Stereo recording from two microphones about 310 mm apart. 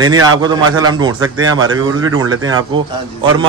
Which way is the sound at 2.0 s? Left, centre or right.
Right.